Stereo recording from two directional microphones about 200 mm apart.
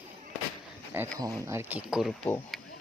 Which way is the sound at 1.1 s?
15° right (ahead or behind).